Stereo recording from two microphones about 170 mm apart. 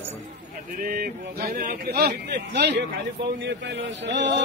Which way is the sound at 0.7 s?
55° right (ahead or behind).